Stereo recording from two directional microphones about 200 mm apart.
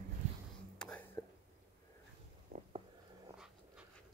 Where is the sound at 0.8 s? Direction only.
5° left (ahead or behind).